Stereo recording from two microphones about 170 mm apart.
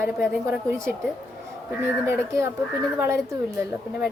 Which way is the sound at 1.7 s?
15° right (ahead or behind).